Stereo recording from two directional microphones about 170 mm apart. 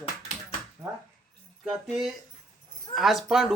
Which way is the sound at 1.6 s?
5° right (ahead or behind).